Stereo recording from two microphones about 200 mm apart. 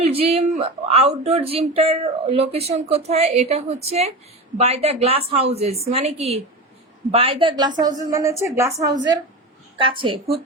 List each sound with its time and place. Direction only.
0.0 s a woman's voice: 30° right (ahead or behind)